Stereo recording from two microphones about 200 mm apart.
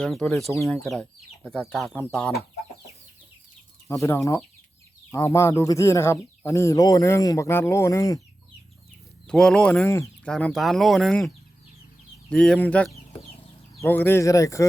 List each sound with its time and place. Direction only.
0.0 s speech: 5° left (ahead or behind)
0.5 s speech: 15° left (ahead or behind)
0.8 s speech: centre (ahead or behind)
3.8 s speech: 15° left (ahead or behind)
9.2 s speech: 5° left (ahead or behind)
10.3 s speech: centre (ahead or behind)
12.3 s speech: 5° left (ahead or behind)